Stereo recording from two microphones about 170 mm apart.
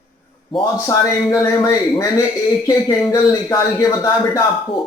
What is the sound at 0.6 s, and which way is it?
A man's voice, 20° left (ahead or behind).